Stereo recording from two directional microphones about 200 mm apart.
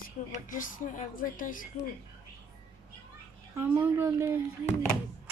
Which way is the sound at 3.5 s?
10° right (ahead or behind).